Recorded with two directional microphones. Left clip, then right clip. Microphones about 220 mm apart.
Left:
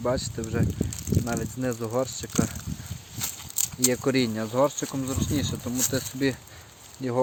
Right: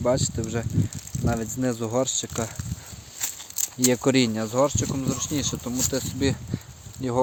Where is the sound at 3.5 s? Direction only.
5° right (ahead or behind).